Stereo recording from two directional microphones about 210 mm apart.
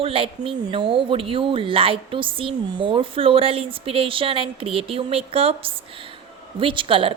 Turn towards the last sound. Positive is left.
turn(degrees=-25)  # may be behind; listen again after turning